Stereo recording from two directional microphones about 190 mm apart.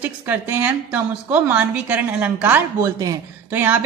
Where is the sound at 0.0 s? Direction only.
10° right (ahead or behind).